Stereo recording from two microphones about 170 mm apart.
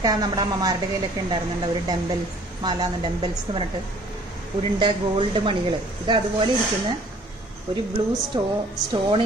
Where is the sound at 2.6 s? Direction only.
25° right (ahead or behind).